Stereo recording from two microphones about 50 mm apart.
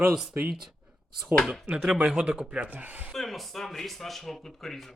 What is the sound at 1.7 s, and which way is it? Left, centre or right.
Speech, right.